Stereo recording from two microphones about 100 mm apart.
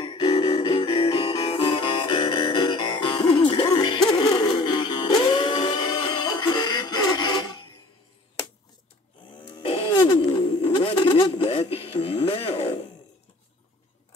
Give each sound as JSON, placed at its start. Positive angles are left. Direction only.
{"t": 0.0, "sound": "music", "side_deg": 60}
{"t": 1.4, "sound": "music", "side_deg": 75}
{"t": 9.6, "sound": "music", "side_deg": 70}
{"t": 9.9, "sound": "a sound", "side_deg": 45}
{"t": 10.6, "sound": "bird", "side_deg": 70}
{"t": 11.1, "sound": "music", "side_deg": 65}